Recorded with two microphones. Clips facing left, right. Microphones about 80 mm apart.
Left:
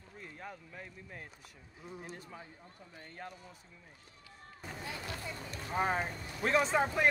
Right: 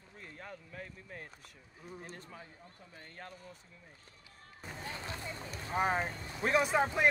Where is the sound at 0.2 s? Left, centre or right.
Centre.